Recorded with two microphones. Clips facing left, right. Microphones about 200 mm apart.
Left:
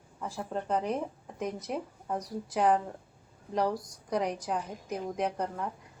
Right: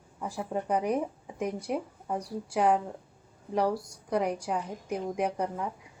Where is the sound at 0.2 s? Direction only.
15° right (ahead or behind).